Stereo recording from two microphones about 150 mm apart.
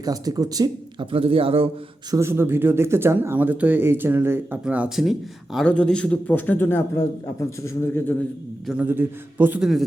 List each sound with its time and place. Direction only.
0.0 s speech: 25° right (ahead or behind)
1.1 s a man's voice: 40° right (ahead or behind)
2.0 s speech: 20° right (ahead or behind)
5.5 s a man's voice: 5° left (ahead or behind)
8.6 s speech: 10° right (ahead or behind)